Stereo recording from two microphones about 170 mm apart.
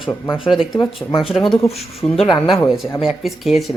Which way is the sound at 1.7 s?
35° left (ahead or behind).